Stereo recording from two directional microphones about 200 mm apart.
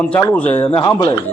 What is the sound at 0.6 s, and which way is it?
Speech, 25° left (ahead or behind).